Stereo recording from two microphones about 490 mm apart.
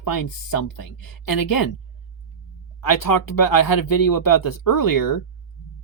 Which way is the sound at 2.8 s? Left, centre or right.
Left.